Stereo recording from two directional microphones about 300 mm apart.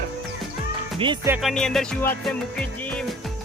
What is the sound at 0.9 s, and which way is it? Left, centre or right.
Speech, centre.